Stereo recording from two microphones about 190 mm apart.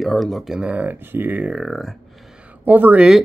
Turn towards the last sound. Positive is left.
turn(degrees=-5)  # may be behind; listen again after turning